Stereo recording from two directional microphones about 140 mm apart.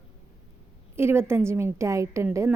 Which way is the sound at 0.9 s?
15° right (ahead or behind).